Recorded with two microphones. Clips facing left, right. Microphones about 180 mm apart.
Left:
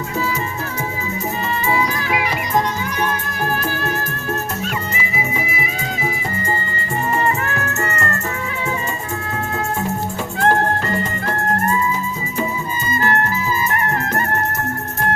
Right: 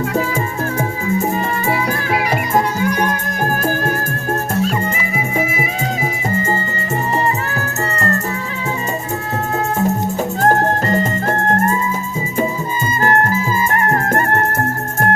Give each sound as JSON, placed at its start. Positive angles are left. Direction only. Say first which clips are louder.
{"t": 1.6, "sound": "music", "louder": "right 2 dB", "side_deg": -45}
{"t": 7.5, "sound": "music", "louder": "right 1 dB", "side_deg": -35}
{"t": 10.4, "sound": "music", "louder": "right 2 dB", "side_deg": -40}
{"t": 13.0, "sound": "music", "louder": "right 4 dB", "side_deg": -45}